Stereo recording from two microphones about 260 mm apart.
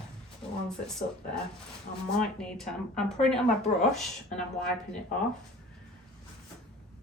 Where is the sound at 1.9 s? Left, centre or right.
Left.